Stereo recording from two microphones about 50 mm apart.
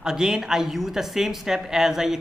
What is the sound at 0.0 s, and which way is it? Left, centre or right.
Speech, centre.